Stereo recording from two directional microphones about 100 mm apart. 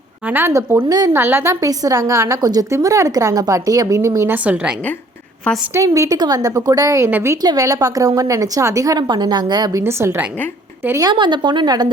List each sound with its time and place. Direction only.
0.3 s a woman's voice: 20° right (ahead or behind)
0.9 s a woman's voice: 40° right (ahead or behind)
1.1 s a woman's voice: 20° right (ahead or behind)
1.6 s a woman's voice: 35° right (ahead or behind)
4.4 s a woman's voice: 15° right (ahead or behind)
5.7 s a woman's voice: 30° right (ahead or behind)
7.4 s a woman's voice: 35° right (ahead or behind)
9.8 s a woman's voice: 25° right (ahead or behind)
11.1 s a woman's voice: 50° right (ahead or behind)